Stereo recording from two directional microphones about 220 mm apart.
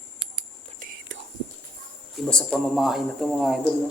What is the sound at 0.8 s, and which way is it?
Whispering, 40° right (ahead or behind).